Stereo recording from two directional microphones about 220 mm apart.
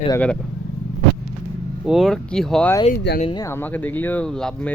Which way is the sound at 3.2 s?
20° left (ahead or behind).